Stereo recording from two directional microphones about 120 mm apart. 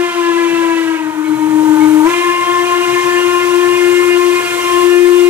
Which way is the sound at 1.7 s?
20° right (ahead or behind).